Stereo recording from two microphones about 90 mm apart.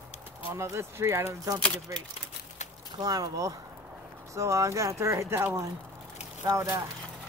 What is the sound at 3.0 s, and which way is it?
Speech, 45° right (ahead or behind).